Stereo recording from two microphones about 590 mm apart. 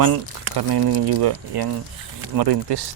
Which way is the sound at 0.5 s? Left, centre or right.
Right.